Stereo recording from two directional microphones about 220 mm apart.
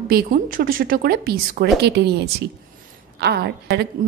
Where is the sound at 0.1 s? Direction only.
40° right (ahead or behind).